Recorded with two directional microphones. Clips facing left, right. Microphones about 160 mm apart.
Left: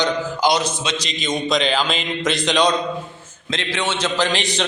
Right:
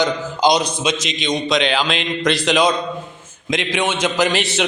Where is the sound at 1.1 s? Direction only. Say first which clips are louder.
Left 2 dB; 5° left (ahead or behind).